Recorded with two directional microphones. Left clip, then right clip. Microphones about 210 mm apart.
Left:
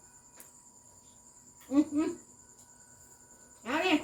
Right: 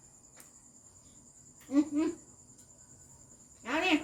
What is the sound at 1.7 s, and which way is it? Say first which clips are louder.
Cricket: left 1 dB; 20° right (ahead or behind).